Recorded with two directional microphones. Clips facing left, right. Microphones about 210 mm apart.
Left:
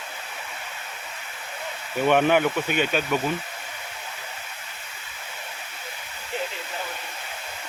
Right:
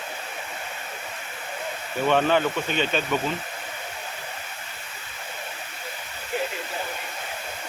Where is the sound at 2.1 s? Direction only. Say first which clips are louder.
Left 2 dB; 15° left (ahead or behind).